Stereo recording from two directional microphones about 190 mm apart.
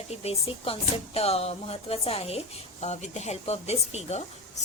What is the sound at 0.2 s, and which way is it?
A woman's voice, 30° left (ahead or behind).